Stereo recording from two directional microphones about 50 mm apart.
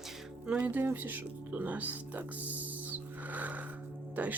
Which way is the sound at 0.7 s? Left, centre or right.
Right.